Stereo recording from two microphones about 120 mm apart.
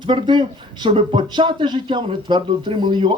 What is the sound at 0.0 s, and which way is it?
Speech, 40° right (ahead or behind).